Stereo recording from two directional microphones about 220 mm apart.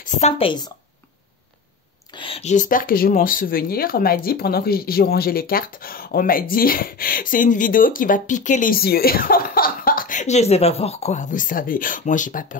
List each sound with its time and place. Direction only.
0.0 s a woman's voice: 30° left (ahead or behind)
2.0 s speech: 25° left (ahead or behind)